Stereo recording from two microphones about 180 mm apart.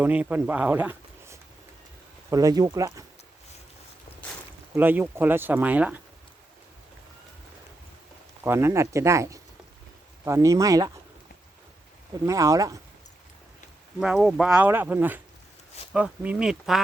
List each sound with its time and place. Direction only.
0.0 s speech: 10° right (ahead or behind)
4.7 s speech: 10° right (ahead or behind)
8.4 s speech: 15° right (ahead or behind)
12.2 s speech: 15° right (ahead or behind)
14.0 s speech: 5° right (ahead or behind)